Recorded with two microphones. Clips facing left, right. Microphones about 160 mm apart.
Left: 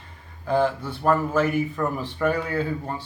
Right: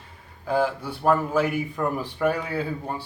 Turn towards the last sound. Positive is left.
turn(degrees=-10)  # may be behind; listen again after turning